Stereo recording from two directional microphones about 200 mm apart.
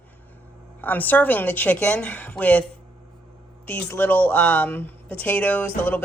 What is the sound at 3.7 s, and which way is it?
Speech, 10° left (ahead or behind).